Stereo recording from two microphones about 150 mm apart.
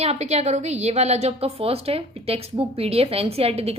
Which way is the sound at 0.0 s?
45° right (ahead or behind).